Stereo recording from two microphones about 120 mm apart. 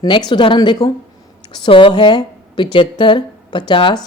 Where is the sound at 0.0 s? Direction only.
40° left (ahead or behind).